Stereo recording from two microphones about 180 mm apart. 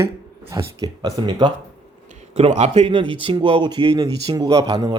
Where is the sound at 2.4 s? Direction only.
35° right (ahead or behind); by 4.9 s 20° right (ahead or behind).